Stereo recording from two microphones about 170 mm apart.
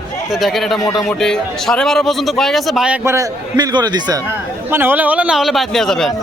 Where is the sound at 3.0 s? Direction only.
20° right (ahead or behind).